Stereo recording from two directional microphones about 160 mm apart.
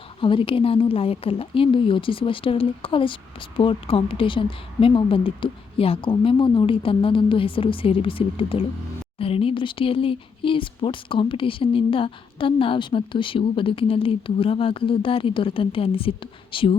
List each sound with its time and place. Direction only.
0.2 s speech: 35° left (ahead or behind)